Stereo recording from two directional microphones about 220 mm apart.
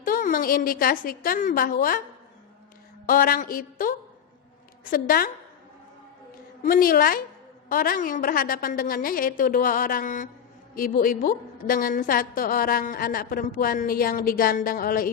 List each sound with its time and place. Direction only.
0.0 s a woman's voice: 40° left (ahead or behind)
3.1 s a woman's voice: 40° left (ahead or behind)
6.6 s a woman's voice: 40° left (ahead or behind)